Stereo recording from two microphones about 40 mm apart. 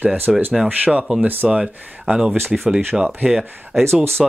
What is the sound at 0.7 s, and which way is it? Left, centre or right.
Speech, right.